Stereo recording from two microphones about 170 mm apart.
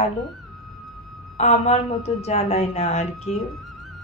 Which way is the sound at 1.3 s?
40° left (ahead or behind).